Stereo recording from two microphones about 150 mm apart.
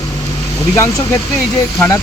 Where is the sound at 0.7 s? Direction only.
20° left (ahead or behind).